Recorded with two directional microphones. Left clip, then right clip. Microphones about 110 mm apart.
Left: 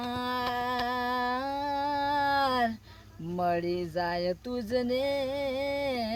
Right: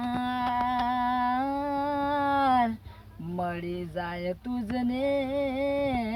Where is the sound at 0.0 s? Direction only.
40° left (ahead or behind).